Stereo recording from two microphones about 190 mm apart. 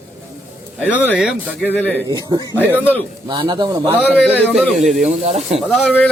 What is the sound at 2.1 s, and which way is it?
A man's voice, 20° right (ahead or behind).